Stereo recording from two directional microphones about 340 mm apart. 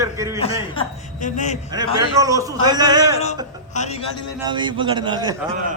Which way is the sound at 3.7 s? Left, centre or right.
Centre.